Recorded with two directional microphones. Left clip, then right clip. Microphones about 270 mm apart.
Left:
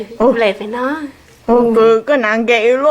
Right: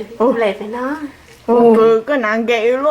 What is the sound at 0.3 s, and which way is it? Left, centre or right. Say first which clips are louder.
Speech: left 3 dB; centre.